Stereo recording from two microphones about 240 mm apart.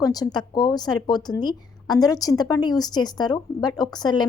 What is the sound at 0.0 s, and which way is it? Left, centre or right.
Speech, centre.